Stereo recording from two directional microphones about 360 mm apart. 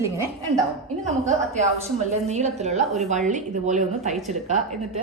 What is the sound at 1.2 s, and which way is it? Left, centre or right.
A woman's voice, centre.